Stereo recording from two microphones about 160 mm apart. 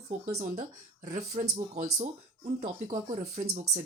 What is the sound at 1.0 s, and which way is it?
Speech, 50° right (ahead or behind).